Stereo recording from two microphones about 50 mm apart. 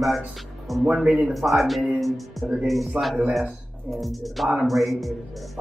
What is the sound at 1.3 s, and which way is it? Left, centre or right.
Speech, centre.